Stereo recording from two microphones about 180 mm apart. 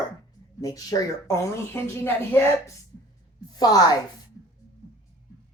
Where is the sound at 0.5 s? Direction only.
20° left (ahead or behind).